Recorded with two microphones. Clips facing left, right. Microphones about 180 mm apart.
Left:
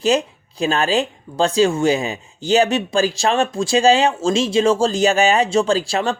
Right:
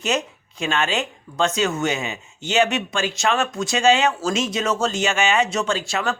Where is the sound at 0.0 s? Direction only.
30° left (ahead or behind).